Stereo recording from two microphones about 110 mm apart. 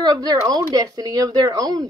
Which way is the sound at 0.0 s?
35° right (ahead or behind).